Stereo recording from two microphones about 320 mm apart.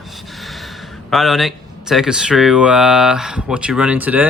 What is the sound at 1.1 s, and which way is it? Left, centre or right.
Speech, centre.